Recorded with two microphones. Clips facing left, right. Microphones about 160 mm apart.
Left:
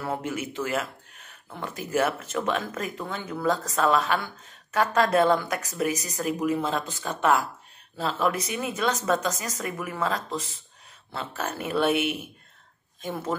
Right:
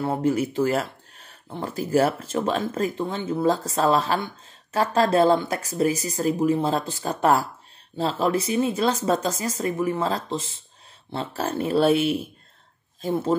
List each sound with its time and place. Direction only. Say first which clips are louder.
0.0 s speech: right 8 dB; 30° right (ahead or behind)